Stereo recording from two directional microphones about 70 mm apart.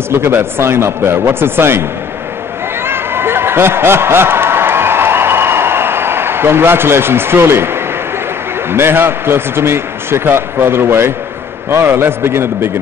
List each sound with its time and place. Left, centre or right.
0.1 s a man's voice: right
2.8 s a sound: right
8.6 s a man's voice: right